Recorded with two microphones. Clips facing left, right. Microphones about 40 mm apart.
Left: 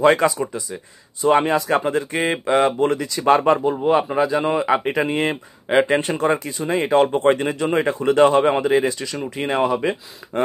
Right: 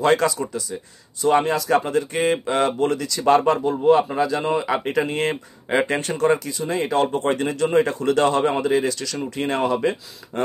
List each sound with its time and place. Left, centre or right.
0.0 s speech: left
5.9 s speech: left
9.2 s speech: centre